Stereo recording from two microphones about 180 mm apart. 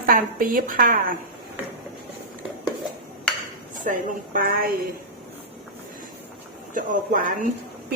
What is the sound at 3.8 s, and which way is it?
Speech, 50° right (ahead or behind).